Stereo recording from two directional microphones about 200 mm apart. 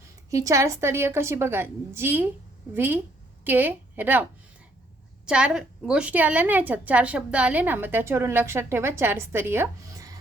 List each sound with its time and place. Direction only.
0.3 s a woman's voice: 15° right (ahead or behind)